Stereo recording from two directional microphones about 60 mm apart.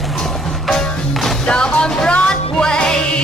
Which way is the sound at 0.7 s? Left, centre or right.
Centre.